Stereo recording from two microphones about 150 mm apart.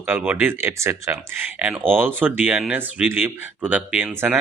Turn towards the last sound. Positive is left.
turn(degrees=-10)  # may be behind; listen again after turning